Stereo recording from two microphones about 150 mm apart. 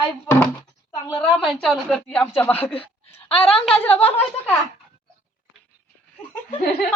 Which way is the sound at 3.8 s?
10° left (ahead or behind).